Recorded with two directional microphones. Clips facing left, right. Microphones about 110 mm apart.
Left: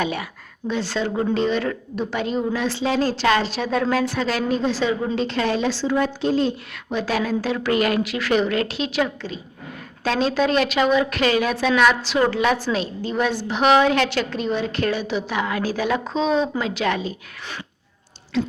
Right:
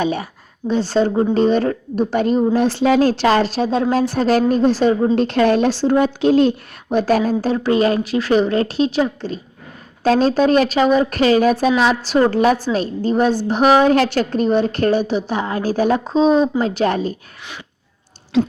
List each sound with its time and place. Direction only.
0.0 s a woman's voice: 30° right (ahead or behind); by 3.2 s 55° right (ahead or behind)
3.2 s a woman's voice: 40° right (ahead or behind); by 6.5 s 65° right (ahead or behind)
6.9 s a woman's voice: 45° right (ahead or behind)